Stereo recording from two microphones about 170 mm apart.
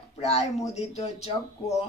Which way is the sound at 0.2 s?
40° left (ahead or behind).